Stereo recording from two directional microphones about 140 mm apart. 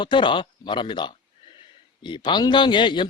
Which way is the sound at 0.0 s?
35° left (ahead or behind).